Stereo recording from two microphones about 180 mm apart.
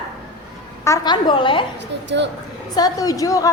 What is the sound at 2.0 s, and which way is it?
Speech, 75° right (ahead or behind).